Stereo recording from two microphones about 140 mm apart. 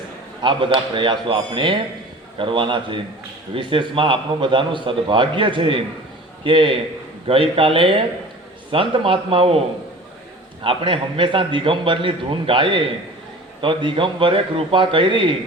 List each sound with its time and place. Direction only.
0.4 s a man's voice: 35° right (ahead or behind)
10.6 s a man's voice: 40° right (ahead or behind)